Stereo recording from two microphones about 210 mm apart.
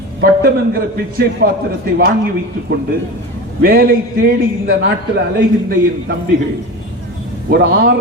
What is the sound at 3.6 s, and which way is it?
A man's voice, 45° right (ahead or behind).